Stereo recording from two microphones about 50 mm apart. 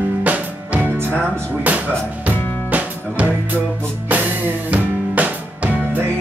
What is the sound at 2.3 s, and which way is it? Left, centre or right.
Music, right.